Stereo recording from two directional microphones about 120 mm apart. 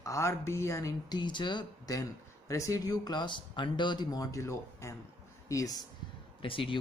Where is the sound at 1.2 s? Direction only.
40° left (ahead or behind).